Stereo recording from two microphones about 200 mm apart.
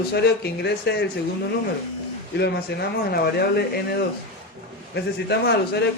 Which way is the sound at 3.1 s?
55° left (ahead or behind).